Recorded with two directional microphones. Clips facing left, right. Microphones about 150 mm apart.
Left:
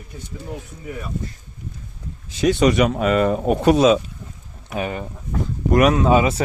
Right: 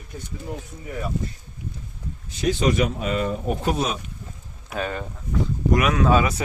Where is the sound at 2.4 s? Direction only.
70° left (ahead or behind); by 4.0 s 90° left.